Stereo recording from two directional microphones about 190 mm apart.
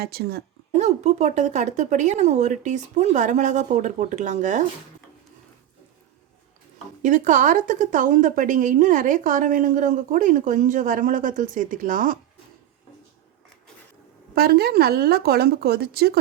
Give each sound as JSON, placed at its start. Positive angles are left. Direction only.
{"t": 0.0, "sound": "speech", "side_deg": -55}
{"t": 0.8, "sound": "speech", "side_deg": -35}
{"t": 7.0, "sound": "speech", "side_deg": -40}
{"t": 14.3, "sound": "speech", "side_deg": -55}